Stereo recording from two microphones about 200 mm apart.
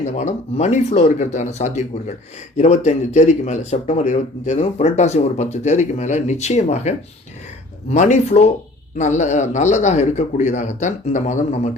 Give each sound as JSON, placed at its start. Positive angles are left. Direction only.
{"t": 0.0, "sound": "speech", "side_deg": 35}